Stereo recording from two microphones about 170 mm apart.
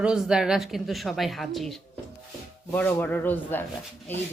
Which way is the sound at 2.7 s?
10° left (ahead or behind).